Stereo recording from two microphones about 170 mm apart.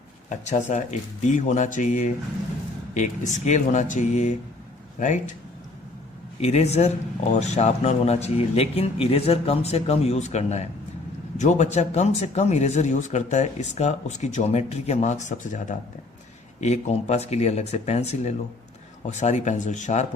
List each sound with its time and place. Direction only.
0.3 s speech: 45° left (ahead or behind)
6.4 s a man's voice: 40° left (ahead or behind)